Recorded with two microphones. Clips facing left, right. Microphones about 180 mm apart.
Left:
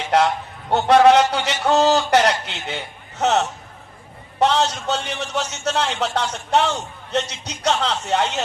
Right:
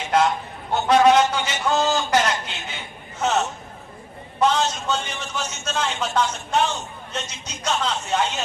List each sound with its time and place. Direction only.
0.1 s a man's voice: 70° left (ahead or behind)